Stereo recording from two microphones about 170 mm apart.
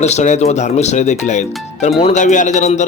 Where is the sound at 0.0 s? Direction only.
40° left (ahead or behind).